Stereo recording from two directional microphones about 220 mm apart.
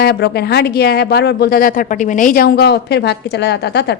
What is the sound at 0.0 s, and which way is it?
Speech, 45° left (ahead or behind).